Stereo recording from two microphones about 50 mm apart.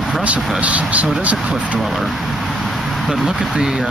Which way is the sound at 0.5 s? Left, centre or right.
Right.